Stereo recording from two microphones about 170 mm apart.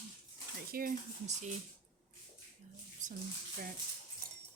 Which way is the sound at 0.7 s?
60° right (ahead or behind).